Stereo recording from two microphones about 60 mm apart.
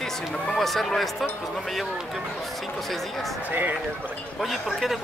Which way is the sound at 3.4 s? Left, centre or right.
Right.